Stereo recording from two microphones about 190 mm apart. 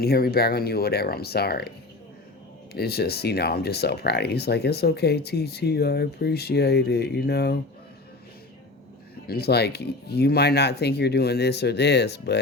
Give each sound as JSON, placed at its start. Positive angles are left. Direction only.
{"t": 0.0, "sound": "speech", "side_deg": 55}
{"t": 2.7, "sound": "speech", "side_deg": 55}
{"t": 9.2, "sound": "speech", "side_deg": 55}